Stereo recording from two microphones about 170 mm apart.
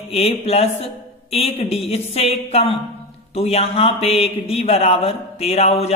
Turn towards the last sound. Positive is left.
turn(degrees=40)  # may be behind; listen again after turning